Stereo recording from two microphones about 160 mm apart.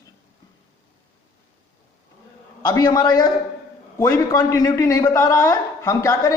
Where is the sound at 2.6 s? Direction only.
25° left (ahead or behind).